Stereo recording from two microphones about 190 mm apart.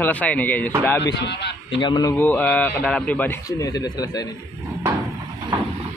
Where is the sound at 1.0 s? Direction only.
65° left (ahead or behind).